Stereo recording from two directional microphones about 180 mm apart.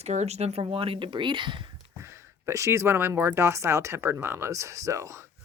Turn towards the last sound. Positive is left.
turn(degrees=-15)  # may be behind; listen again after turning